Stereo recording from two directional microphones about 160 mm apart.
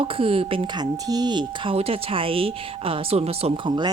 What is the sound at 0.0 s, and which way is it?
Speech, 35° right (ahead or behind).